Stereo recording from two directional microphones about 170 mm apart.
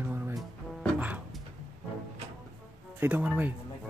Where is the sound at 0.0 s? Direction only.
10° right (ahead or behind).